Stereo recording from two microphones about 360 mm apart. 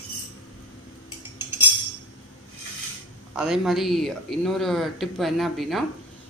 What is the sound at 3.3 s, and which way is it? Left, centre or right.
Speech, centre.